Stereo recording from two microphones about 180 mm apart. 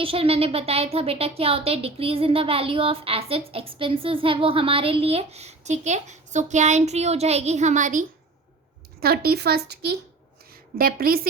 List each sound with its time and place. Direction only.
0.0 s a woman's voice: 30° right (ahead or behind)
9.0 s speech: 60° right (ahead or behind)
10.5 s a woman's voice: 55° right (ahead or behind)